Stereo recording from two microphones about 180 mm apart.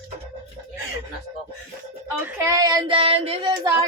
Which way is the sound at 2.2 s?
15° right (ahead or behind).